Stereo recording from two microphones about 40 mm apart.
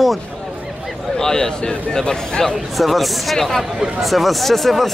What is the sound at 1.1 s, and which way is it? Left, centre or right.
Speech, centre.